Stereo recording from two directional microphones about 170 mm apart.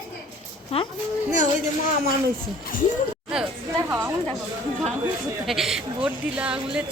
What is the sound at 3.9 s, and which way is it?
Speech, 15° right (ahead or behind).